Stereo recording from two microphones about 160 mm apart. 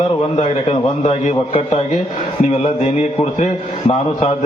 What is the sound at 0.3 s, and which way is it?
A man's voice, 50° left (ahead or behind).